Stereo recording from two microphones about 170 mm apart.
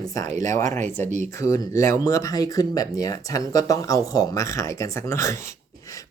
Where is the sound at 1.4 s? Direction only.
20° left (ahead or behind).